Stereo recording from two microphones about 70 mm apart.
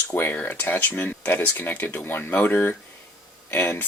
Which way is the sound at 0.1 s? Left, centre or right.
Left.